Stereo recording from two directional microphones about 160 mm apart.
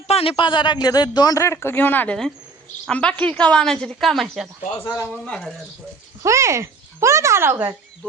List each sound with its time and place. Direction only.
0.1 s a man's voice: 35° left (ahead or behind); by 4.4 s centre (ahead or behind)
4.8 s speech: 15° left (ahead or behind)
5.2 s a woman's voice: 5° left (ahead or behind)
6.2 s speech: 20° right (ahead or behind)